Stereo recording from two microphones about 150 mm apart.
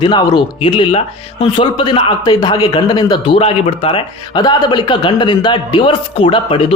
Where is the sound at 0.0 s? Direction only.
30° left (ahead or behind).